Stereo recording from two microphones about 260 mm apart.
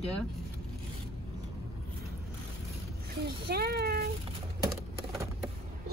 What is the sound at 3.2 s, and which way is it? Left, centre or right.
Speech, right.